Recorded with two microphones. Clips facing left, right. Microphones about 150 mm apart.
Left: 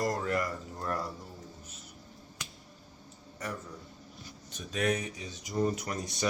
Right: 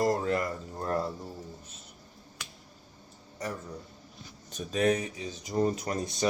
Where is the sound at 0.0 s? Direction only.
25° right (ahead or behind).